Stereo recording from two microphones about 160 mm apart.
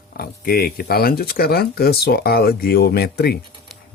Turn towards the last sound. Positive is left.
turn(degrees=80)